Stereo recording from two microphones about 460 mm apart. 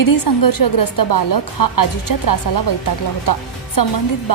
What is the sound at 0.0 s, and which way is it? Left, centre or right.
A woman's voice, left.